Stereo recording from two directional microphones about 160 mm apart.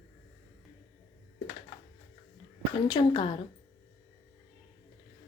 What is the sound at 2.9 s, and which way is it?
Speech, 30° left (ahead or behind).